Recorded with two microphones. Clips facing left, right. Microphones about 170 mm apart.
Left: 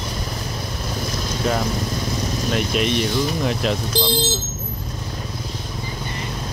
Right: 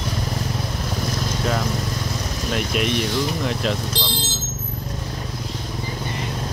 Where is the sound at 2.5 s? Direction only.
Centre (ahead or behind).